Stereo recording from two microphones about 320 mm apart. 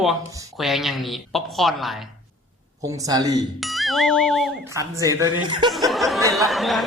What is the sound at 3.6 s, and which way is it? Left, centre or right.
A woman's voice, centre.